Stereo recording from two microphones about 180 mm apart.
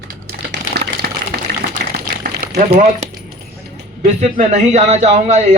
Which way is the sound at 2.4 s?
55° right (ahead or behind).